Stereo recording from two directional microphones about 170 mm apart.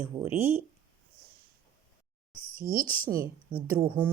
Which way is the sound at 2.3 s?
30° left (ahead or behind).